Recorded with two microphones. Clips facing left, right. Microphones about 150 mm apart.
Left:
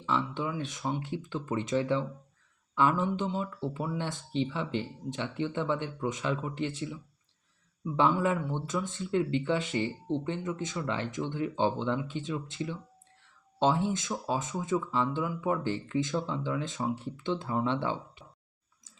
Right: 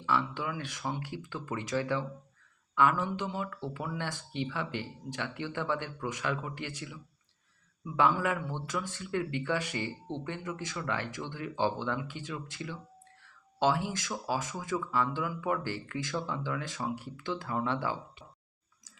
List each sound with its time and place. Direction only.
0.0 s speech: 20° left (ahead or behind)